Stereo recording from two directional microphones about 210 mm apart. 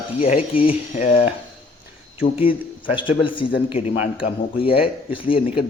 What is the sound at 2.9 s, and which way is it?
A man's voice, 25° left (ahead or behind).